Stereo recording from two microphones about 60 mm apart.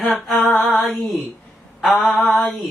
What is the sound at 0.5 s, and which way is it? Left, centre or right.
Mantra, centre.